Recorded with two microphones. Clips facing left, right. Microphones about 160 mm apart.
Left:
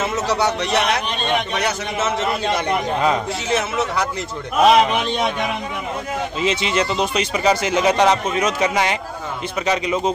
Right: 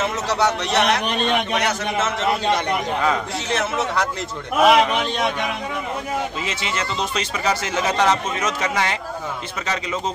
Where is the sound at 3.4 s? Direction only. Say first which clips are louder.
Left 1 dB; 5° left (ahead or behind).